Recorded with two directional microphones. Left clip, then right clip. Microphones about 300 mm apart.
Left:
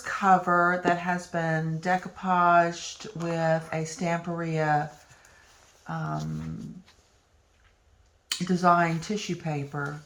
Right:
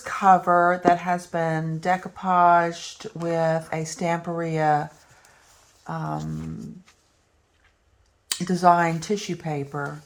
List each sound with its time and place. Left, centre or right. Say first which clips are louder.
0.0 s speech: right 4 dB; centre
8.3 s speech: right 4 dB; centre